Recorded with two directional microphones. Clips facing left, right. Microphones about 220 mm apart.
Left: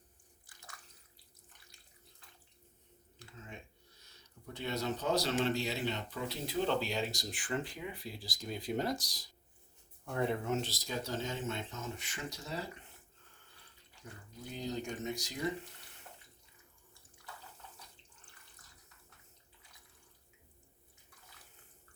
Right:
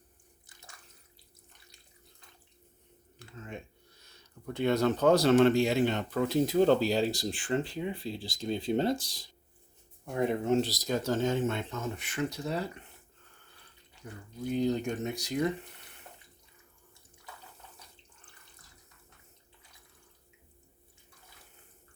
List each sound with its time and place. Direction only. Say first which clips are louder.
4.4 s speech: right 10 dB; 55° right (ahead or behind); by 9.3 s 30° right (ahead or behind)
10.1 s speech: right 5 dB; 15° right (ahead or behind)
10.5 s speech: right 9 dB; 35° right (ahead or behind)
10.9 s speech: right 10 dB; 50° right (ahead or behind)
14.5 s speech: right 10 dB; 60° right (ahead or behind)